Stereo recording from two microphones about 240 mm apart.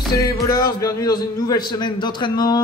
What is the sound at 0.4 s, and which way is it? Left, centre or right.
A man's voice, centre.